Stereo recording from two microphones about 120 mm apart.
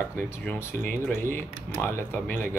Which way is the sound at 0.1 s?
20° left (ahead or behind).